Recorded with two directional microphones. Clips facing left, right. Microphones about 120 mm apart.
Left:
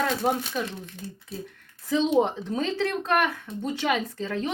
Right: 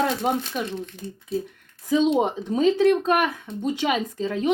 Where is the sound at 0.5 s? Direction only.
10° right (ahead or behind).